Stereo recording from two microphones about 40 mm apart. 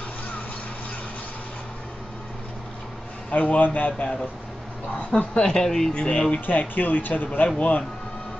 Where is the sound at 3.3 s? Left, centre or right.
Left.